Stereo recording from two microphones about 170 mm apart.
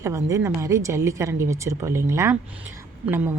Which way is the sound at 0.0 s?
20° right (ahead or behind).